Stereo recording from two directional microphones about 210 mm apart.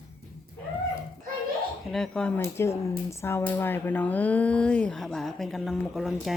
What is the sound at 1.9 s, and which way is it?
Speech, 5° left (ahead or behind).